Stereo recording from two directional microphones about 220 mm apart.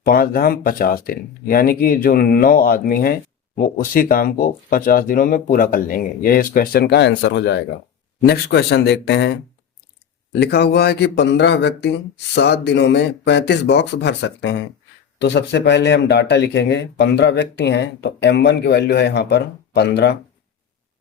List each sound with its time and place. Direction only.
0.0 s speech: 40° left (ahead or behind)
10.4 s speech: 50° left (ahead or behind)